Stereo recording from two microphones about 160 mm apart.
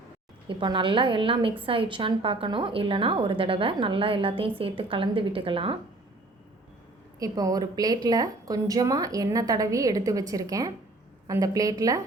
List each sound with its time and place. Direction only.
0.4 s a woman's voice: 30° right (ahead or behind)
7.2 s a woman's voice: 25° right (ahead or behind)